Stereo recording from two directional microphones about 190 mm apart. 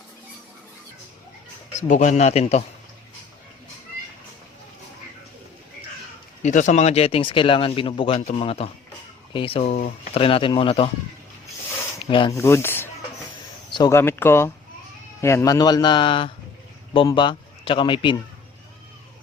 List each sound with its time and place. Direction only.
1.9 s a man's voice: 40° left (ahead or behind)
6.4 s a man's voice: 40° left (ahead or behind)
10.2 s speech: 30° left (ahead or behind)
12.0 s speech: 25° left (ahead or behind)
12.4 s a man's voice: 10° left (ahead or behind)